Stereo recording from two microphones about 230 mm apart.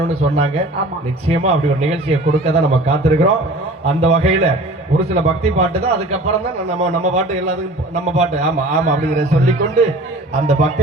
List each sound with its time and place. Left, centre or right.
0.0 s a man's voice: right